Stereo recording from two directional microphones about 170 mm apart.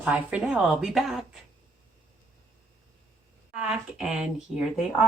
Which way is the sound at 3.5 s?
5° right (ahead or behind).